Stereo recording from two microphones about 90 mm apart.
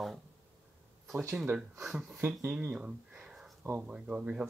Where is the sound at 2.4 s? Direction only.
15° right (ahead or behind).